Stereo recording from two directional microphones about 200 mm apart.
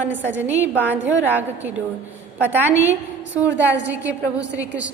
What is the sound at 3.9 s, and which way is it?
A woman's voice, 10° right (ahead or behind).